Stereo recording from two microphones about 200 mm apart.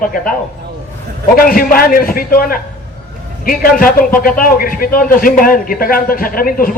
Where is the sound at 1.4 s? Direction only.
45° left (ahead or behind).